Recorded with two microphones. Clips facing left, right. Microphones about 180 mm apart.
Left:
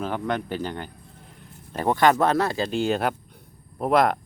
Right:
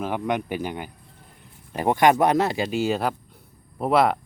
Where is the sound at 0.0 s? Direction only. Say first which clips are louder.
Right 1 dB; 10° right (ahead or behind).